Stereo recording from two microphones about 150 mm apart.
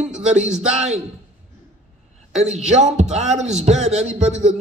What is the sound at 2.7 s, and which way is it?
A man's voice, 50° right (ahead or behind).